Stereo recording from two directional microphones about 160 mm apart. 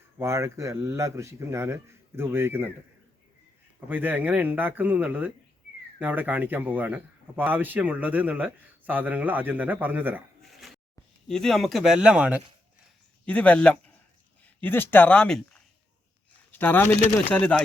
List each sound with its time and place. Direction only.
0.2 s speech: 15° right (ahead or behind)
3.8 s speech: 10° right (ahead or behind)
10.5 s a sound: centre (ahead or behind)
11.3 s speech: centre (ahead or behind)
13.2 s speech: 10° left (ahead or behind)